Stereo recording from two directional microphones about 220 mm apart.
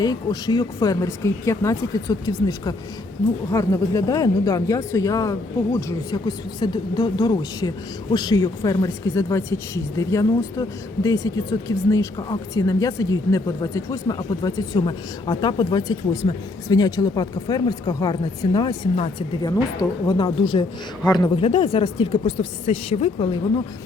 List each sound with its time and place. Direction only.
0.0 s speech: 20° left (ahead or behind)